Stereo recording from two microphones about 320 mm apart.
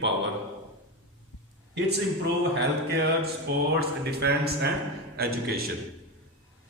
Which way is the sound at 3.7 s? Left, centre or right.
Right.